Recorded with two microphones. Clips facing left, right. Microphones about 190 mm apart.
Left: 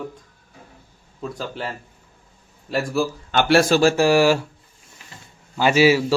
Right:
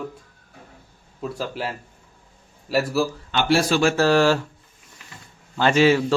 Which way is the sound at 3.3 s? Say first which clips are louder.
Left 4 dB; 45° left (ahead or behind).